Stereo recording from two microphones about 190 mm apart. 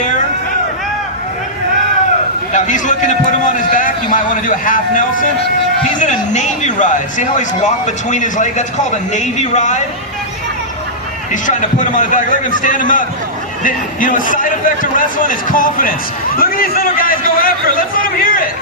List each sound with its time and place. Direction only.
2.5 s a sound: 40° left (ahead or behind)
6.0 s a man's voice: 40° left (ahead or behind)
11.4 s a man's voice: 40° left (ahead or behind)